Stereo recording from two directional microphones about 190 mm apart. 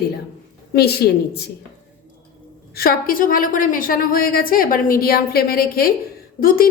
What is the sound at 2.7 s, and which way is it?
A woman's voice, 50° left (ahead or behind).